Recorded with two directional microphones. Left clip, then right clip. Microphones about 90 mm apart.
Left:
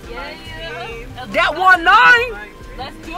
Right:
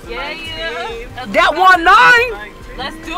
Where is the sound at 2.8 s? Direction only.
30° right (ahead or behind).